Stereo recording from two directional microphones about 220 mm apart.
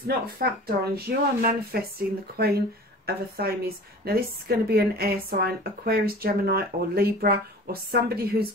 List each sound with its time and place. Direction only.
0.0 s a woman's voice: 45° right (ahead or behind)